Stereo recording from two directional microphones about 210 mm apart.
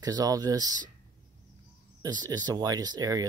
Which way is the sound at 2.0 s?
20° right (ahead or behind).